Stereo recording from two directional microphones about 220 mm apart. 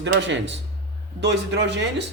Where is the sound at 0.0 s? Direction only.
55° right (ahead or behind).